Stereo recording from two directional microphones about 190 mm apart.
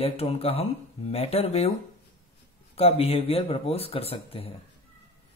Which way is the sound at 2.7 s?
30° left (ahead or behind).